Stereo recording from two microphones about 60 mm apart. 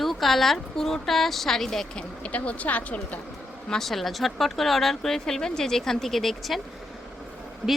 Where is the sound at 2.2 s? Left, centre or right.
Left.